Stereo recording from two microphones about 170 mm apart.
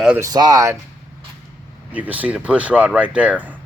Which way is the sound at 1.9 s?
10° right (ahead or behind).